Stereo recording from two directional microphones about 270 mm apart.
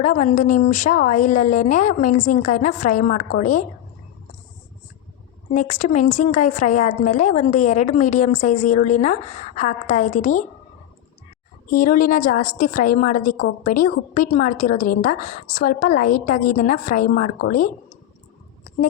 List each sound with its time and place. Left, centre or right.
0.0 s a woman's voice: left
5.5 s a woman's voice: left
11.7 s a woman's voice: left